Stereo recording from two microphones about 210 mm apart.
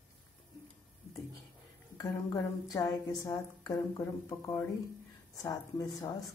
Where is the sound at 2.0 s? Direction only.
15° left (ahead or behind).